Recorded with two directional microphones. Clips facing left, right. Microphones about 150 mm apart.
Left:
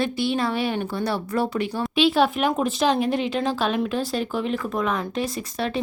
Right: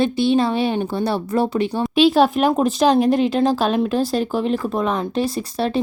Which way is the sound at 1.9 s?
40° right (ahead or behind).